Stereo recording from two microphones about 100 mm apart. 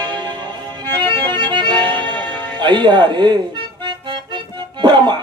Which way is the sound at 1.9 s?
15° left (ahead or behind).